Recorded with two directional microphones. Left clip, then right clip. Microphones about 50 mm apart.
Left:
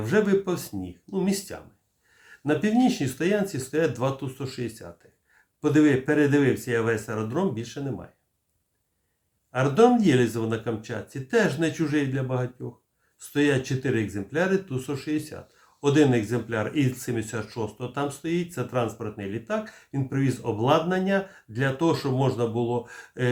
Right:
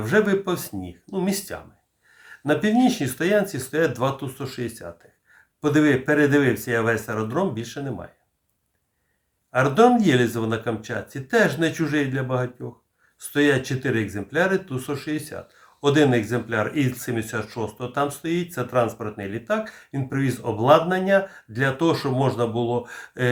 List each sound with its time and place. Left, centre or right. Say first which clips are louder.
0.0 s speech: right 3 dB; right
9.5 s speech: right 3 dB; right